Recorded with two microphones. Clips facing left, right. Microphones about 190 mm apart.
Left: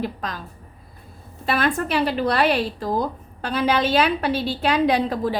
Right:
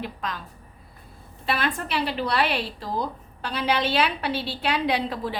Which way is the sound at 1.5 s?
45° left (ahead or behind).